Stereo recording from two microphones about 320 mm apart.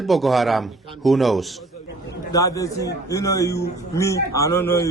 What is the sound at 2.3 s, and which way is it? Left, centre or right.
A man's voice, centre.